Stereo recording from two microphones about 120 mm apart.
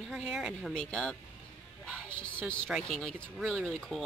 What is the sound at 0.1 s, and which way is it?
Speech, 10° right (ahead or behind).